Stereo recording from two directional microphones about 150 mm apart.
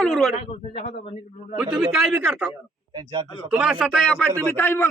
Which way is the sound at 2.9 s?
35° right (ahead or behind).